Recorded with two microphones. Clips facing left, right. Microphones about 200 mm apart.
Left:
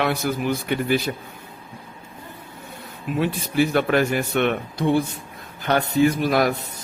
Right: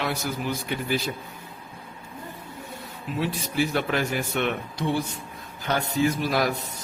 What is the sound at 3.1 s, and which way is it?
Speech, 55° left (ahead or behind).